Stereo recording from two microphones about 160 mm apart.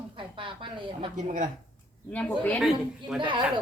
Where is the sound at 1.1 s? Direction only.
50° right (ahead or behind).